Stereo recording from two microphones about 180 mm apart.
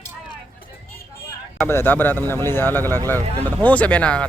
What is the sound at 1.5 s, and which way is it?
A man's voice, 10° left (ahead or behind).